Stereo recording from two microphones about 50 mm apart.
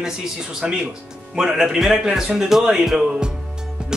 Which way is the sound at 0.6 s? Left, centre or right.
Centre.